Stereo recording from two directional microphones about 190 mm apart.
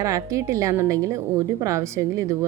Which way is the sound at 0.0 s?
15° right (ahead or behind).